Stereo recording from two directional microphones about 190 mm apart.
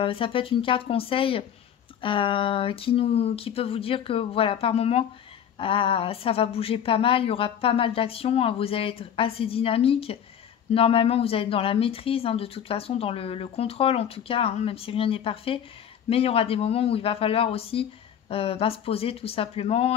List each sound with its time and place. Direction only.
0.0 s speech: 30° left (ahead or behind)